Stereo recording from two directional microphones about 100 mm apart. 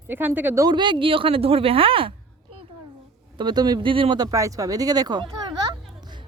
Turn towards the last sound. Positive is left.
turn(degrees=-45)  # may be behind; listen again after turning